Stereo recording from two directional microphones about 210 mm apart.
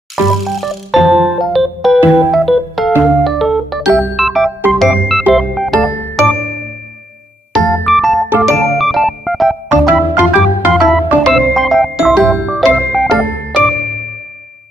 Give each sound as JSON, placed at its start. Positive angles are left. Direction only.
{"t": 0.1, "sound": "music", "side_deg": 0}
{"t": 7.5, "sound": "music", "side_deg": 0}
{"t": 8.5, "sound": "organ", "side_deg": 0}